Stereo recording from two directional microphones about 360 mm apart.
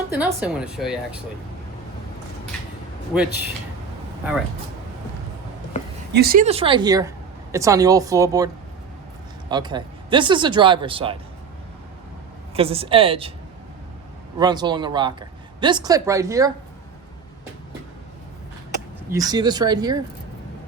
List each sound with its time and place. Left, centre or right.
0.1 s speech: centre
3.1 s speech: centre
6.1 s speech: right; by 8.4 s centre
9.5 s speech: centre
12.5 s speech: centre
14.3 s speech: centre
19.1 s speech: centre